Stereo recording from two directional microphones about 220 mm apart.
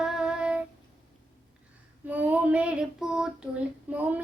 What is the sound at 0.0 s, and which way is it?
Child singing, 5° right (ahead or behind).